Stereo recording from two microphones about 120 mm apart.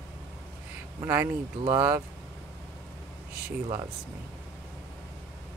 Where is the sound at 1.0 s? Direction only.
20° right (ahead or behind).